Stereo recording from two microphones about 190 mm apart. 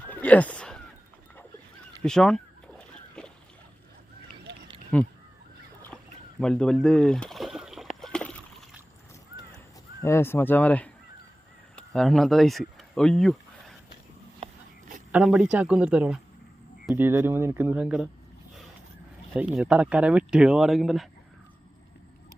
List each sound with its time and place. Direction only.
0.1 s a sound: 10° left (ahead or behind)
2.0 s a sound: 5° left (ahead or behind)
4.9 s speech: 5° left (ahead or behind)
5.9 s rowboat: centre (ahead or behind)
6.4 s boat: 5° left (ahead or behind)
10.0 s speech: 15° left (ahead or behind)
15.1 s speech: 5° right (ahead or behind)
19.4 s speech: 5° right (ahead or behind)